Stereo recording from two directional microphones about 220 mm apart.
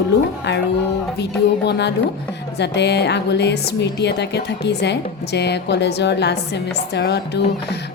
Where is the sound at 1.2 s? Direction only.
50° left (ahead or behind).